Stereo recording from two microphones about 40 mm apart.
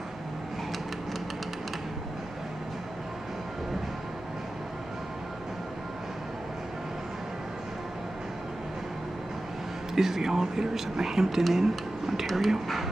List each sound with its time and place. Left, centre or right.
9.9 s speech: centre